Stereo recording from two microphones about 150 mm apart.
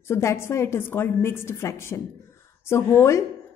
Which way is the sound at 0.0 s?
20° left (ahead or behind).